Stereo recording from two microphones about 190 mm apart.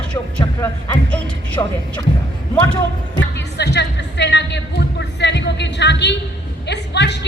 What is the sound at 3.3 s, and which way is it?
Music, 65° left (ahead or behind).